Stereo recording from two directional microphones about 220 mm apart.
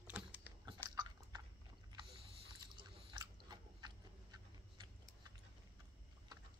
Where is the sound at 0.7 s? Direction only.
20° right (ahead or behind).